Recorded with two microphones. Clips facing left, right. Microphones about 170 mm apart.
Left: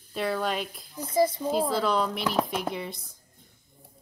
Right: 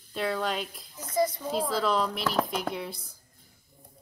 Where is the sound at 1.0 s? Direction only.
30° left (ahead or behind).